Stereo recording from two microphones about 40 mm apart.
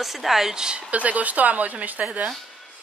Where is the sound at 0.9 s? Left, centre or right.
Right.